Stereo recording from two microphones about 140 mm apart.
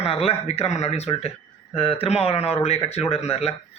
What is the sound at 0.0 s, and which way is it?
A man's voice, 45° left (ahead or behind).